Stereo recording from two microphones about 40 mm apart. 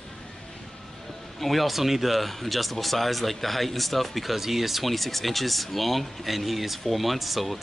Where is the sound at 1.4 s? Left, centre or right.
Centre.